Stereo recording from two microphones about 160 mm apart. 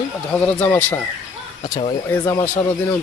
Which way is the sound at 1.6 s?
35° left (ahead or behind).